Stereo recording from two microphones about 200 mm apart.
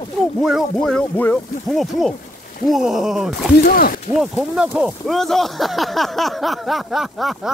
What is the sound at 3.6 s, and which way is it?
Speech, 45° left (ahead or behind).